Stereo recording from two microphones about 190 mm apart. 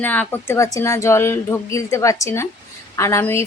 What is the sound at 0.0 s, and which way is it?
Speech, 10° left (ahead or behind).